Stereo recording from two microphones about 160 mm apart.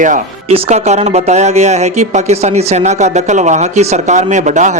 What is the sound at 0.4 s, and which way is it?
Speech, 40° right (ahead or behind).